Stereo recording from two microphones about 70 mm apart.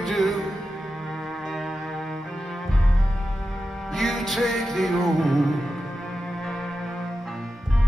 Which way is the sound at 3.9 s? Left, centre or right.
Centre.